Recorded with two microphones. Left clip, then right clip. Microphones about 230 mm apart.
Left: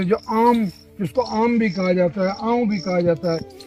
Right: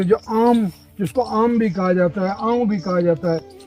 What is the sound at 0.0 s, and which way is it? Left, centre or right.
Speech, right.